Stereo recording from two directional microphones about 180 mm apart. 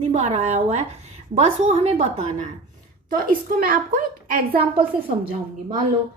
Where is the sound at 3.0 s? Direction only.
50° right (ahead or behind).